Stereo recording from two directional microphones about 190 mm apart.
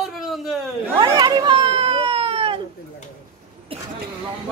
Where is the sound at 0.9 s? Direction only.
25° right (ahead or behind).